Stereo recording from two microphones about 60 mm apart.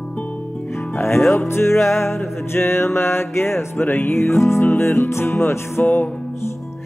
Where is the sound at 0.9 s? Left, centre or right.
Left.